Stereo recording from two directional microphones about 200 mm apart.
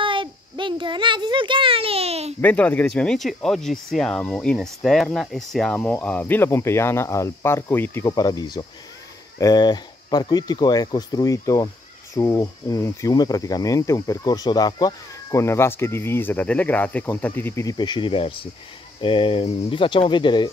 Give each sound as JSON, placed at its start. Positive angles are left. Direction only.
{"t": 0.0, "sound": "a child's voice", "side_deg": -25}
{"t": 2.4, "sound": "speech", "side_deg": 5}